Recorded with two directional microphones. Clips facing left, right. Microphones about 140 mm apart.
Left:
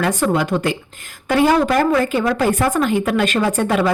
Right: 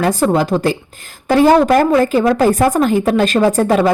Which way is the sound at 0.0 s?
35° right (ahead or behind).